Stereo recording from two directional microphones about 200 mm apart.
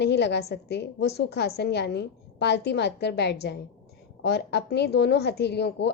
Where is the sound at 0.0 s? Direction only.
60° left (ahead or behind).